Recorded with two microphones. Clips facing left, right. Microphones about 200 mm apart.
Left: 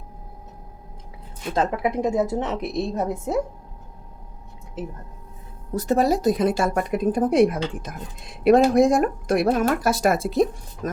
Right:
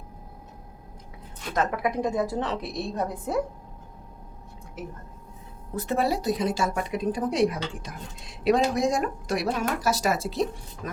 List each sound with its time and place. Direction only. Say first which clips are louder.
1.5 s a woman's voice: left 3 dB; 25° left (ahead or behind)
5.7 s a woman's voice: left 6 dB; 40° left (ahead or behind)